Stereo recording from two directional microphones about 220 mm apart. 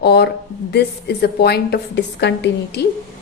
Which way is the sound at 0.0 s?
50° left (ahead or behind).